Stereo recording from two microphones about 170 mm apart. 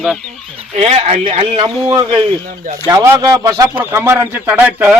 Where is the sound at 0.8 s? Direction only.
40° right (ahead or behind).